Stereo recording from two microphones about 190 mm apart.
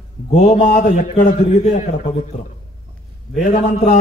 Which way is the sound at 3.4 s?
45° left (ahead or behind).